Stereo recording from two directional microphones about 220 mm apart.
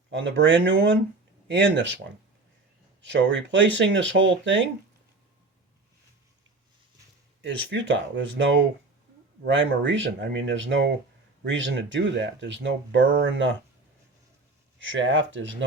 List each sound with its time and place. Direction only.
0.1 s speech: 55° right (ahead or behind)
3.0 s speech: 55° right (ahead or behind)
7.7 s speech: 55° right (ahead or behind)
14.8 s speech: 55° right (ahead or behind)